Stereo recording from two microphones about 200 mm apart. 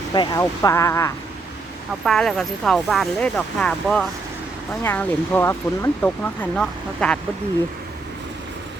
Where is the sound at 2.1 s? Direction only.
Centre (ahead or behind).